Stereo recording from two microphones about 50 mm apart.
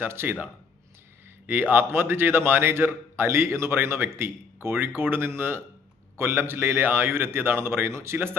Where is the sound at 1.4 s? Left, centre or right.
Right.